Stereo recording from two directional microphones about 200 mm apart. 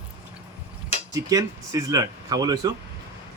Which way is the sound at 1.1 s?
20° right (ahead or behind).